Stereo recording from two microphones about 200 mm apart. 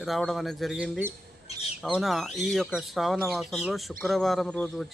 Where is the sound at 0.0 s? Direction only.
Centre (ahead or behind).